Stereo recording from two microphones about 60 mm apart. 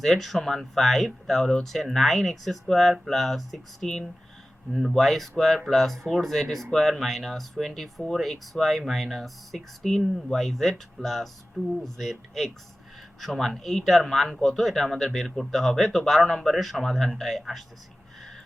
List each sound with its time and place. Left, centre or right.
0.0 s speech: centre